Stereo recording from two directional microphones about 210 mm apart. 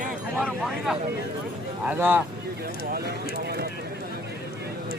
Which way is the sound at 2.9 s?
45° right (ahead or behind).